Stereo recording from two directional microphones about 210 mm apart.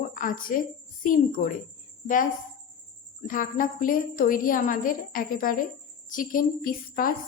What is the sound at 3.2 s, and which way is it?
A woman's voice, 40° left (ahead or behind).